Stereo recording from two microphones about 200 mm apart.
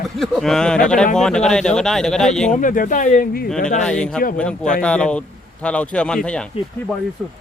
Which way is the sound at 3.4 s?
5° left (ahead or behind).